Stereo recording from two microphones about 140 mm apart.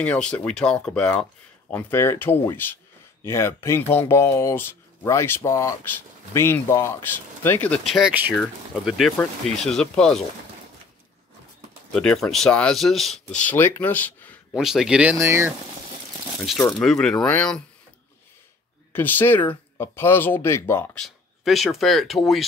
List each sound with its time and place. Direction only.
0.0 s speech: 10° left (ahead or behind)
7.8 s speech: centre (ahead or behind)
11.9 s speech: 5° left (ahead or behind)
14.5 s speech: centre (ahead or behind)
15.1 s speech: 20° right (ahead or behind)
16.4 s speech: 5° left (ahead or behind)
18.9 s speech: 15° left (ahead or behind)
21.0 s speech: centre (ahead or behind)